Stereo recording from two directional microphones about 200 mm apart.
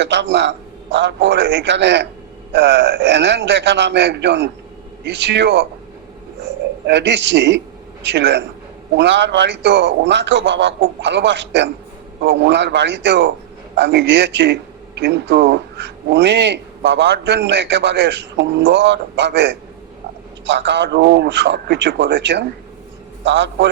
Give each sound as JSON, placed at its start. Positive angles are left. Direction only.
{"t": 0.0, "sound": "a man's voice", "side_deg": -60}
{"t": 6.8, "sound": "a man's voice", "side_deg": -60}